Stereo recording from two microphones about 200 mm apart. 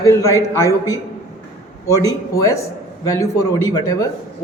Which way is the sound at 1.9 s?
15° left (ahead or behind).